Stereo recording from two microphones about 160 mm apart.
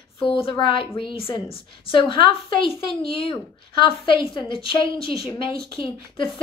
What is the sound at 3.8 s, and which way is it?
A woman's voice, 35° left (ahead or behind).